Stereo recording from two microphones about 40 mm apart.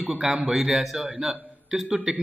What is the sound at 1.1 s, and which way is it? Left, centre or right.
A man's voice, centre.